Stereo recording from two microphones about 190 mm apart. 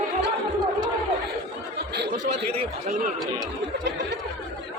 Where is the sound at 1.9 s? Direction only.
60° right (ahead or behind).